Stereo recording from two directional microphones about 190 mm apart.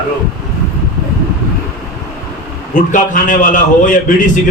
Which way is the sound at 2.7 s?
45° left (ahead or behind).